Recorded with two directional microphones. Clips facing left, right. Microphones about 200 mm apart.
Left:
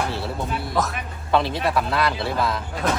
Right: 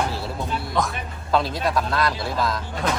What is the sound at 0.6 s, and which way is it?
Speech, centre (ahead or behind).